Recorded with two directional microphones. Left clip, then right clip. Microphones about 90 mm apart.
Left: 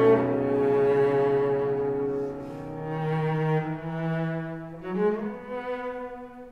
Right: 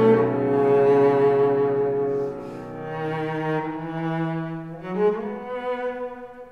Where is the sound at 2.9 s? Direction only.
35° right (ahead or behind).